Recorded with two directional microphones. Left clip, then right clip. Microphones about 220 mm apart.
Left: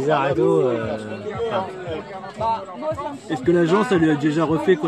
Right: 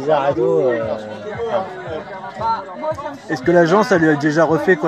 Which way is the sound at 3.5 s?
Centre (ahead or behind).